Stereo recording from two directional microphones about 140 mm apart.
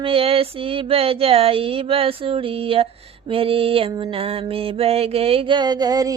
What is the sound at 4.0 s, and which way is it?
Mantra, 40° right (ahead or behind).